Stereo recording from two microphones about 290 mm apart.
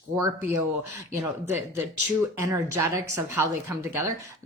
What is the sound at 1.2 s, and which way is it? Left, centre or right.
A woman's voice, centre.